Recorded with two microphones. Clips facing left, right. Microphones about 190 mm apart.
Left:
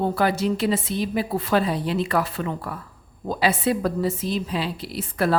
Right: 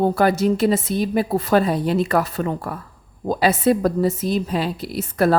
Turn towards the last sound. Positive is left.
turn(degrees=-45)  # may be behind; listen again after turning